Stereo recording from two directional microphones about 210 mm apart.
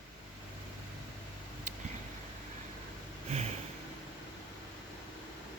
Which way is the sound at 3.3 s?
30° right (ahead or behind).